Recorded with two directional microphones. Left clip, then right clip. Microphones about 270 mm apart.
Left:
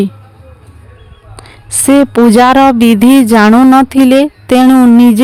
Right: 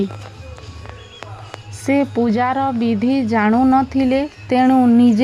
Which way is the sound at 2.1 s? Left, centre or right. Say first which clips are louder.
Left 12 dB; left.